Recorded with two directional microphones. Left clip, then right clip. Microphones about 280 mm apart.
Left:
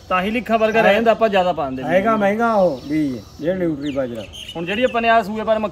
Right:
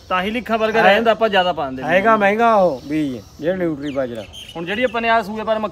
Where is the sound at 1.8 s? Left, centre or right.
Right.